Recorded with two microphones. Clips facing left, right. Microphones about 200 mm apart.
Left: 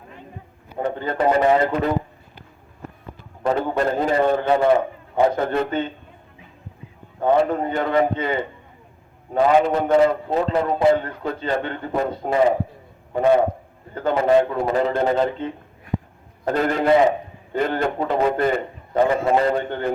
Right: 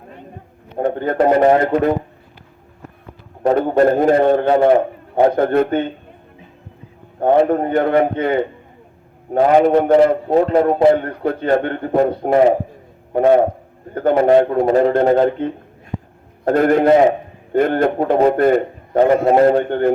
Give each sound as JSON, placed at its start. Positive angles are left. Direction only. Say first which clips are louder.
{"t": 0.8, "sound": "a man's voice", "louder": "right 6 dB", "side_deg": -50}
{"t": 3.4, "sound": "a man's voice", "louder": "right 7 dB", "side_deg": -50}
{"t": 7.2, "sound": "a man's voice", "louder": "right 5 dB", "side_deg": -50}